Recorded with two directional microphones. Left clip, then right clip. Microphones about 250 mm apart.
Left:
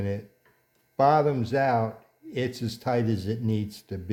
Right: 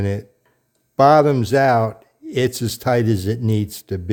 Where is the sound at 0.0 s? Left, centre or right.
Right.